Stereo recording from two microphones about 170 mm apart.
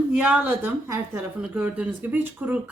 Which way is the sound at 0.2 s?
10° right (ahead or behind).